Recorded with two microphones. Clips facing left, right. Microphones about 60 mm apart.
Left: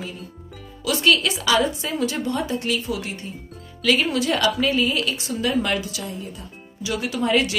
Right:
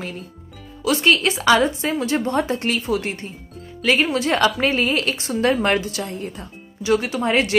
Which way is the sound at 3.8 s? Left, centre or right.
Right.